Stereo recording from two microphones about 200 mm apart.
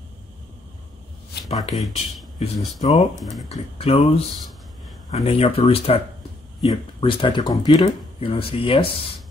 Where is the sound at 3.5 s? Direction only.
30° left (ahead or behind).